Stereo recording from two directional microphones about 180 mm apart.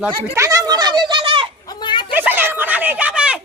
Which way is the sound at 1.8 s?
25° left (ahead or behind).